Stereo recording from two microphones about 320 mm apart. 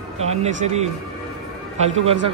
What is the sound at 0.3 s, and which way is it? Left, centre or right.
Speech, centre.